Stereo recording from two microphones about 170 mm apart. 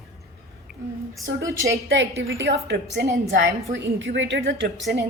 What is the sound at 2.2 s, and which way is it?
Speech, 75° right (ahead or behind).